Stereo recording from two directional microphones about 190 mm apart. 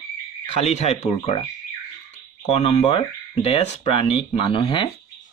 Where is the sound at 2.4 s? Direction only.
35° left (ahead or behind).